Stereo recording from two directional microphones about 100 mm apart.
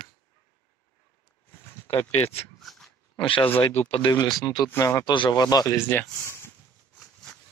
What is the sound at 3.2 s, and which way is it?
Speech, 65° left (ahead or behind).